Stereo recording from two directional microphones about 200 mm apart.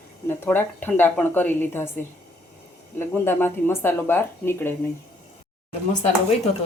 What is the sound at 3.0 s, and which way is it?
Speech, 10° left (ahead or behind).